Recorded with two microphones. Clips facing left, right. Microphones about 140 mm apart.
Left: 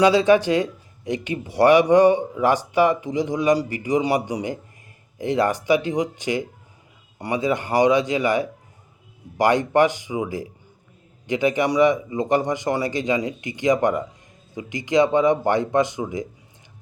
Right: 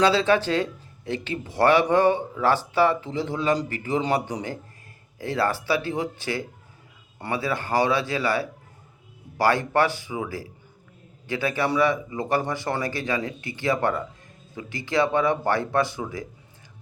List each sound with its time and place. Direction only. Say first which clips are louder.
0.0 s speech: left 4 dB; 15° left (ahead or behind)